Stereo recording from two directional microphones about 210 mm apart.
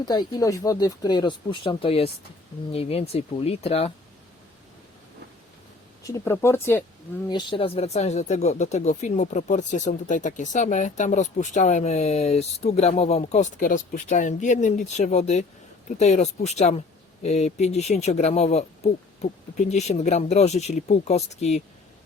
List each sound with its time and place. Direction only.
0.0 s speech: 20° left (ahead or behind)
6.0 s speech: 15° left (ahead or behind)
7.3 s speech: 25° left (ahead or behind)